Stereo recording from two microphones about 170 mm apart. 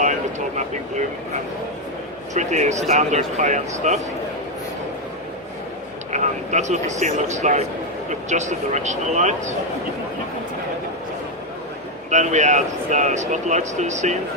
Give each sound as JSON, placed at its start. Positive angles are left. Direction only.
{"t": 0.0, "sound": "speech", "side_deg": -45}
{"t": 2.3, "sound": "speech", "side_deg": -45}
{"t": 6.1, "sound": "speech", "side_deg": -45}
{"t": 12.1, "sound": "speech", "side_deg": -45}